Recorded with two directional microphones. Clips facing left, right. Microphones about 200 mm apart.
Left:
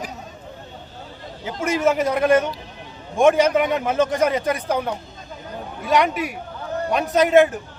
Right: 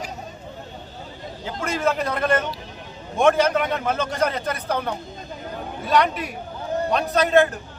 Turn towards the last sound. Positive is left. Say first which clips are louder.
# left 3 dB
turn(degrees=15)  # may be behind; listen again after turning